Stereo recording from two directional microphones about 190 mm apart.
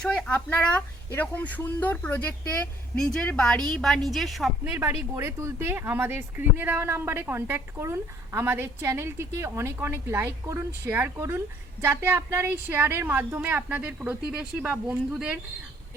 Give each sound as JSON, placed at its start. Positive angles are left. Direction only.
{"t": 0.0, "sound": "a woman's voice", "side_deg": 5}